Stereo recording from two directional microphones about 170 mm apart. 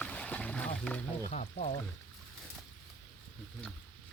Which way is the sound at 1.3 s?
40° left (ahead or behind).